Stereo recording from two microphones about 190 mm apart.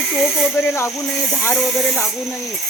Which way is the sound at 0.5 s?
15° left (ahead or behind).